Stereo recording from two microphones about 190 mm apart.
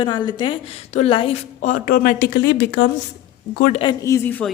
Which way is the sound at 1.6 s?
45° left (ahead or behind).